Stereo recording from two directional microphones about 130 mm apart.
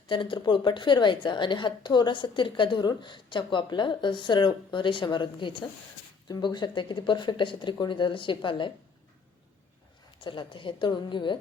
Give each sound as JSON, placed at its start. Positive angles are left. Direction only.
{"t": 0.1, "sound": "a woman's voice", "side_deg": 40}
{"t": 10.2, "sound": "a woman's voice", "side_deg": 40}